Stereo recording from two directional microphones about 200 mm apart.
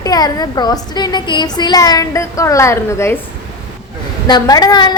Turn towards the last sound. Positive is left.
turn(degrees=20)  # may be behind; listen again after turning